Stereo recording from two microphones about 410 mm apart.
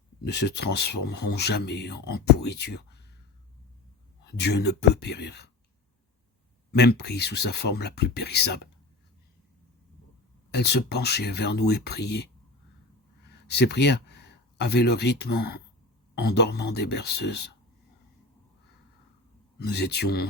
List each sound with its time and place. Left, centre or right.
0.2 s speech: left
4.2 s speech: left
6.7 s speech: left
10.5 s speech: left
19.5 s speech: left